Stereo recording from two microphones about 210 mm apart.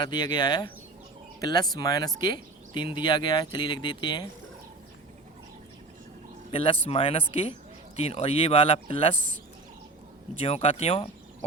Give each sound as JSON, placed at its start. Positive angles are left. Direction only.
{"t": 0.0, "sound": "speech", "side_deg": 20}
{"t": 6.5, "sound": "speech", "side_deg": 25}
{"t": 9.1, "sound": "speech", "side_deg": -40}
{"t": 10.4, "sound": "speech", "side_deg": 30}